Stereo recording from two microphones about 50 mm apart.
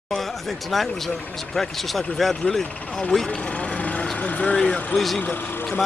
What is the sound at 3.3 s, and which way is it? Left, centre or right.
Vehicle, left.